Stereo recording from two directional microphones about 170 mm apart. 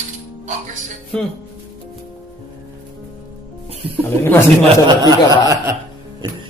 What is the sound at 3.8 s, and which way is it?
Speech, 35° right (ahead or behind).